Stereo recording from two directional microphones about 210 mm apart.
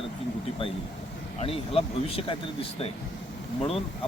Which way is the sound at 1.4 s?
25° left (ahead or behind).